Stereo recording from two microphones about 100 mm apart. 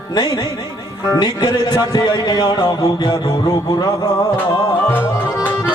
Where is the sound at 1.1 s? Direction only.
45° left (ahead or behind).